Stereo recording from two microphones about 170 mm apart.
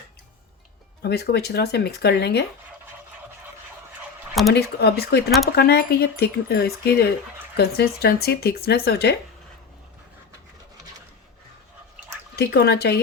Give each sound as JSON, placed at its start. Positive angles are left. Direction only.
{"t": 1.0, "sound": "speech", "side_deg": 75}
{"t": 4.5, "sound": "speech", "side_deg": 70}
{"t": 12.4, "sound": "speech", "side_deg": 75}